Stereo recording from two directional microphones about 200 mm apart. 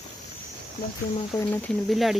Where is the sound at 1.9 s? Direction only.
Centre (ahead or behind).